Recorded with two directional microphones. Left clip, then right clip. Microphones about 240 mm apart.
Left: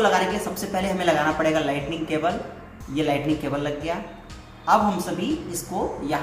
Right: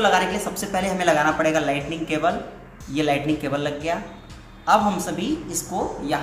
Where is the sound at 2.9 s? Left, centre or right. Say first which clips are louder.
Right 2 dB; right.